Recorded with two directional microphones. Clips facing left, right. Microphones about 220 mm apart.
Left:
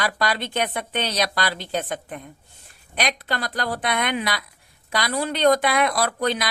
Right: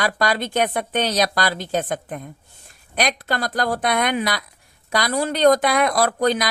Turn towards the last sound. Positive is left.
turn(degrees=-45)  # may be behind; listen again after turning